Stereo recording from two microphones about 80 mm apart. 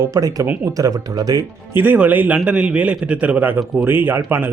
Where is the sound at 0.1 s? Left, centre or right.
Right.